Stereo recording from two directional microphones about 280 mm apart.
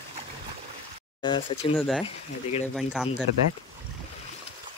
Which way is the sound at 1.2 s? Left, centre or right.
Centre.